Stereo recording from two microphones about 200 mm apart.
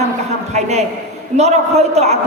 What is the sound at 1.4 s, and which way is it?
Speech, 35° right (ahead or behind).